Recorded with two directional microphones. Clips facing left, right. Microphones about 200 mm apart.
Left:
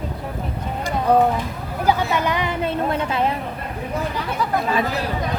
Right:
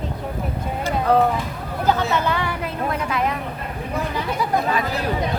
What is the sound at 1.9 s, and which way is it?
Speech, 15° left (ahead or behind).